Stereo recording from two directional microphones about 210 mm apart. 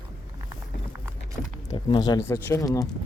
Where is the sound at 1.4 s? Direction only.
35° left (ahead or behind).